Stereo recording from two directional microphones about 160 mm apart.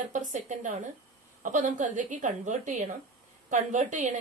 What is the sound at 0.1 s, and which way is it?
A woman's voice, 50° right (ahead or behind).